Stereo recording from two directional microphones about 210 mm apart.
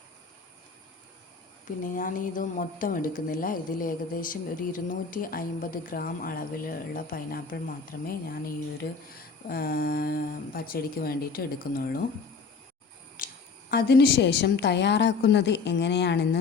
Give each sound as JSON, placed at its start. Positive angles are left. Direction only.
{"t": 1.8, "sound": "speech", "side_deg": 40}
{"t": 9.5, "sound": "speech", "side_deg": 45}
{"t": 13.1, "sound": "a woman's voice", "side_deg": 40}